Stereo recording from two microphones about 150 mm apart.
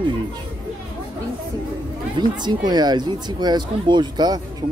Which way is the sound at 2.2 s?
30° right (ahead or behind).